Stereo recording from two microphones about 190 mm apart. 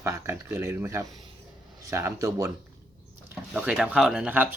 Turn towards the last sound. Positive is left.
turn(degrees=-10)  # may be behind; listen again after turning